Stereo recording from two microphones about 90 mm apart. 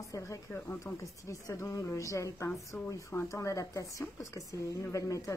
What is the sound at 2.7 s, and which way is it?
Speech, 25° left (ahead or behind).